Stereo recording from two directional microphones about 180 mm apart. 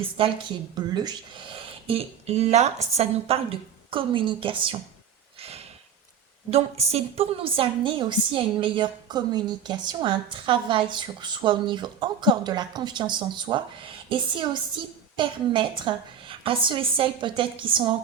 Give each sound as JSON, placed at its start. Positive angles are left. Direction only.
{"t": 0.0, "sound": "a woman's voice", "side_deg": -30}
{"t": 6.5, "sound": "a woman's voice", "side_deg": -35}